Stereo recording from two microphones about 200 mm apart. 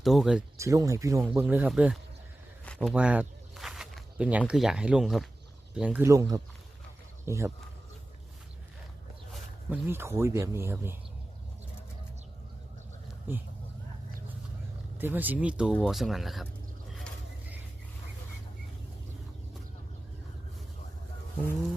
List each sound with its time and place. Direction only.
0.0 s speech: centre (ahead or behind)
0.5 s speech: 15° right (ahead or behind)
2.6 s a sound: 5° left (ahead or behind)
2.9 s speech: 5° right (ahead or behind)
9.3 s speech: 10° right (ahead or behind)
14.9 s speech: 10° right (ahead or behind)